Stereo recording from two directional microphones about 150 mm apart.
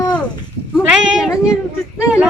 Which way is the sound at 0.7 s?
5° right (ahead or behind).